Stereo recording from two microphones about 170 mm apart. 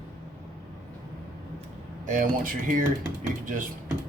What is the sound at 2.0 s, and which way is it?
Speech, 50° right (ahead or behind).